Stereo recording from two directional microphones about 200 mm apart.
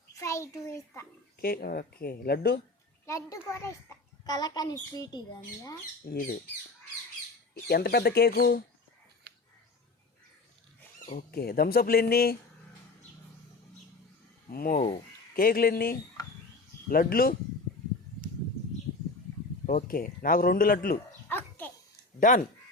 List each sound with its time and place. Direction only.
0.1 s a child's voice: 15° left (ahead or behind)
1.4 s speech: 50° left (ahead or behind)
3.1 s a child's voice: 15° left (ahead or behind)
6.1 s speech: 45° left (ahead or behind)
7.5 s speech: 55° left (ahead or behind)
11.0 s speech: 45° left (ahead or behind)
14.5 s speech: 45° left (ahead or behind)
14.8 s speech: 25° left (ahead or behind)
15.4 s speech: 45° left (ahead or behind)
19.6 s speech: 45° left (ahead or behind)
21.2 s dog: 10° left (ahead or behind)